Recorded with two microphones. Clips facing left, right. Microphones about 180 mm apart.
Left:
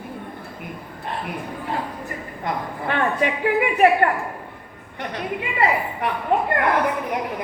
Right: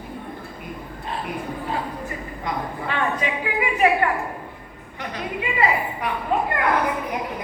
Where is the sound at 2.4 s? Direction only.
55° left (ahead or behind).